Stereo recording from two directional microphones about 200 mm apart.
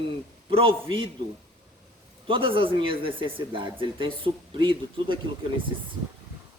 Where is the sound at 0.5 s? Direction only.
25° right (ahead or behind).